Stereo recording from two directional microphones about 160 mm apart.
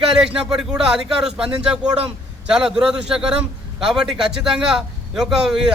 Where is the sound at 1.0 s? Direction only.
5° right (ahead or behind).